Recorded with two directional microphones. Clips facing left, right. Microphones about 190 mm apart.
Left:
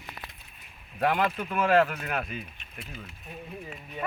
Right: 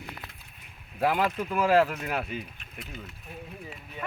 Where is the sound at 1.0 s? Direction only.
5° right (ahead or behind).